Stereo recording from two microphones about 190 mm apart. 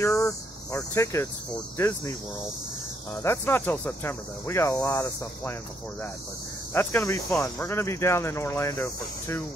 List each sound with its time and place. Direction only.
0.0 s speech: 15° left (ahead or behind)
3.2 s speech: 15° left (ahead or behind)
6.7 s speech: 10° left (ahead or behind)